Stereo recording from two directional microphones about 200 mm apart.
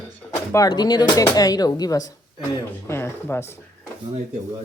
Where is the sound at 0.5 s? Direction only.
20° left (ahead or behind).